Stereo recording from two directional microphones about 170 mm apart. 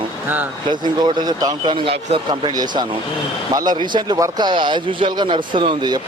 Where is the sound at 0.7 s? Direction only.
25° right (ahead or behind).